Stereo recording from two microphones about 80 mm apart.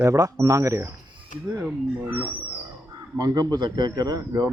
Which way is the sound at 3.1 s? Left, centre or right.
Right.